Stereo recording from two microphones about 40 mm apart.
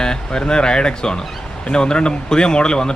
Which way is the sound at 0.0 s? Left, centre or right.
Centre.